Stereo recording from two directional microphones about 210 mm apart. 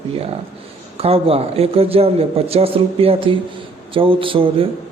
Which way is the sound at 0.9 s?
25° right (ahead or behind).